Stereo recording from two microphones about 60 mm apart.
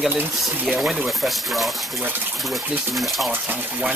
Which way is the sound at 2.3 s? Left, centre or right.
Centre.